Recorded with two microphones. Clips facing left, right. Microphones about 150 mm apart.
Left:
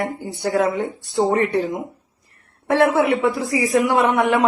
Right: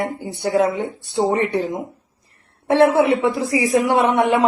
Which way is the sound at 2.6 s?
20° right (ahead or behind).